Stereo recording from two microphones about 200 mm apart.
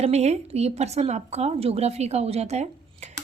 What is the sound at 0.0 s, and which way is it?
A woman's voice, 35° right (ahead or behind).